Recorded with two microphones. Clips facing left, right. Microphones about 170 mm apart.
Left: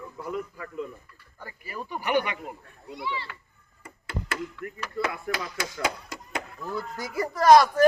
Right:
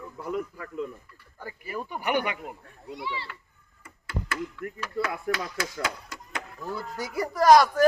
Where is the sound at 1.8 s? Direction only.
10° right (ahead or behind).